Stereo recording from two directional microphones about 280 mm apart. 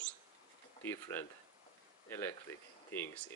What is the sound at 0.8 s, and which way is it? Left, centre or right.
Speech, centre.